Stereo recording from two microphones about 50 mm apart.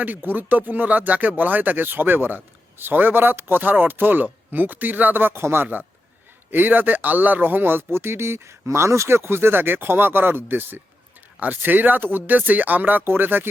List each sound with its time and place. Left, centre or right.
0.0 s a man's voice: right
6.5 s a man's voice: right